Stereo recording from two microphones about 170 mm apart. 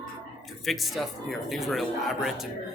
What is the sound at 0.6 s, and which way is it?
Speech, centre (ahead or behind).